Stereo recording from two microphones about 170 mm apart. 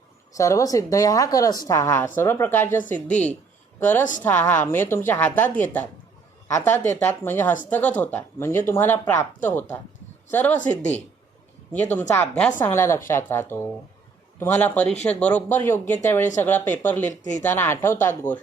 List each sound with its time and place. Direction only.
0.3 s a woman's voice: 20° left (ahead or behind)